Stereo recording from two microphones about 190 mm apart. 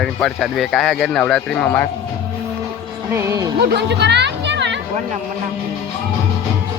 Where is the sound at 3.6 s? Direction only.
60° right (ahead or behind).